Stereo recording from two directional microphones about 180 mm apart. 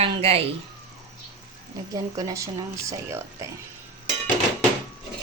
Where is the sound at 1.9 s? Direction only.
20° right (ahead or behind).